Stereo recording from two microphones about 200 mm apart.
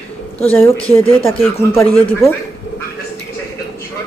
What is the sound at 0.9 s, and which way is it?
Speech, 10° left (ahead or behind).